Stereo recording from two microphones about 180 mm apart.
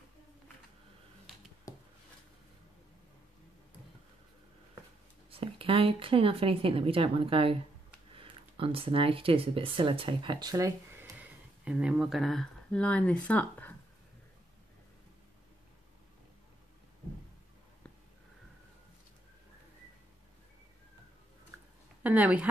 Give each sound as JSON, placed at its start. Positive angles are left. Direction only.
{"t": 5.3, "sound": "speech", "side_deg": -30}
{"t": 22.0, "sound": "speech", "side_deg": -10}